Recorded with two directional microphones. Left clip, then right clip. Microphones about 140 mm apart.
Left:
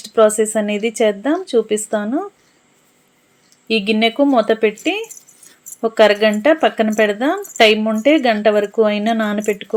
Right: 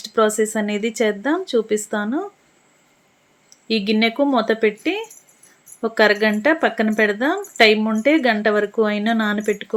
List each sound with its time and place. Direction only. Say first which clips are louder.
0.0 s speech: left 5 dB; 15° left (ahead or behind)
3.7 s speech: left 3 dB; 15° left (ahead or behind)